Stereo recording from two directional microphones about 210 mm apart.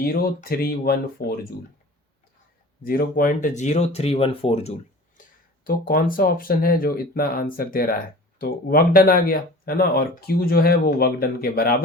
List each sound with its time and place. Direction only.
0.0 s speech: 45° left (ahead or behind)
2.8 s speech: 45° left (ahead or behind); by 4.7 s 30° left (ahead or behind)
5.6 s speech: 45° left (ahead or behind)